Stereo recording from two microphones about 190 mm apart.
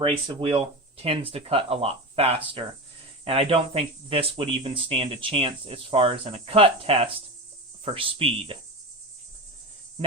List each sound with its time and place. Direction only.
0.0 s speech: 25° right (ahead or behind)